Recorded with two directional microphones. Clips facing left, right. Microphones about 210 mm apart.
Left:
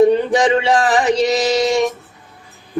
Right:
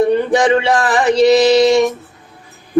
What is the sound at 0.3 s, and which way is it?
Speech, 60° right (ahead or behind).